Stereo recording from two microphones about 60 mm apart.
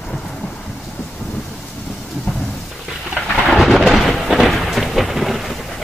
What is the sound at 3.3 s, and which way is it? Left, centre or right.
Thunder, centre.